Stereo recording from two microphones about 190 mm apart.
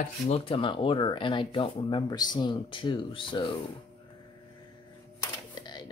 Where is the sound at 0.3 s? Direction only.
30° left (ahead or behind).